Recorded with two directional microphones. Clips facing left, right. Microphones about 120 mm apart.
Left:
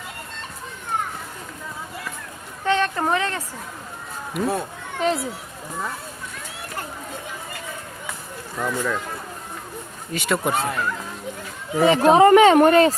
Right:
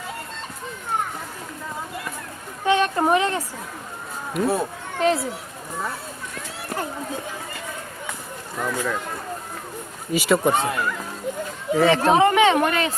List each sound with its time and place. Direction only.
2.6 s a sound: 15° right (ahead or behind)
4.4 s speech: centre (ahead or behind)
8.6 s speech: 5° right (ahead or behind)
10.1 s speech: 5° right (ahead or behind)
11.7 s speech: 10° left (ahead or behind)
12.1 s speech: 45° left (ahead or behind)